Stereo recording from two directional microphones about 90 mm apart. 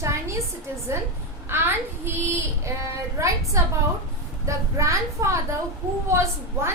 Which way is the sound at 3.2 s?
35° right (ahead or behind).